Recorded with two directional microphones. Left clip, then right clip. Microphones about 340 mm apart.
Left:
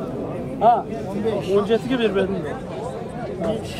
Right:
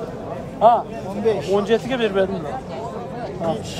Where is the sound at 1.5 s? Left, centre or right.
Right.